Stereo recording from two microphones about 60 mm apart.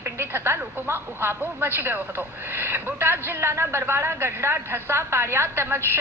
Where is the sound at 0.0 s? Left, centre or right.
Right.